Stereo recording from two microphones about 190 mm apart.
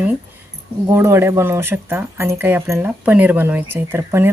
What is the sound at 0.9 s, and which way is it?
Speech, 15° right (ahead or behind).